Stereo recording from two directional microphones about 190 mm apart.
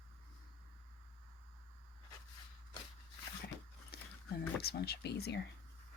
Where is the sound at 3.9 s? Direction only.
60° left (ahead or behind).